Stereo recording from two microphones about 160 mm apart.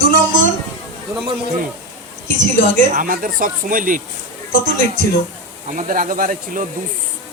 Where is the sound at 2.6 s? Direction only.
55° right (ahead or behind).